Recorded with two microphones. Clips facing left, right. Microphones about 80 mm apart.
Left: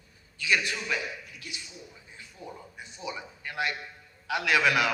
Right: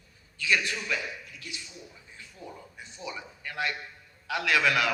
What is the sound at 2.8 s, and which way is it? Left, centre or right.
A man's voice, left.